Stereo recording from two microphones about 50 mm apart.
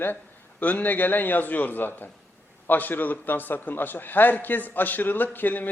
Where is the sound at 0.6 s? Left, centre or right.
Left.